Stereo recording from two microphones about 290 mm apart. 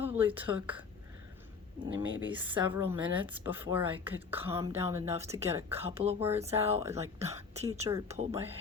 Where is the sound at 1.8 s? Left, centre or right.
Right.